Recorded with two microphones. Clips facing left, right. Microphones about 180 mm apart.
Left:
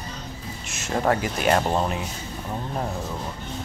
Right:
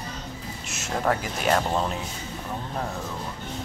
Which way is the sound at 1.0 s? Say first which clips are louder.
Left 3 dB; centre (ahead or behind).